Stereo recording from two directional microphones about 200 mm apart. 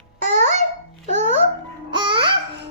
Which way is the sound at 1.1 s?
35° right (ahead or behind).